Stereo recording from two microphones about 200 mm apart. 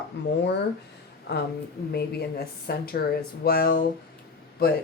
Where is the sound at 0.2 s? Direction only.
60° left (ahead or behind).